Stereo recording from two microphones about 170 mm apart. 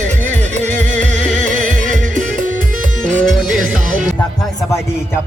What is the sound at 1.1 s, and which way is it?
Music, 45° right (ahead or behind).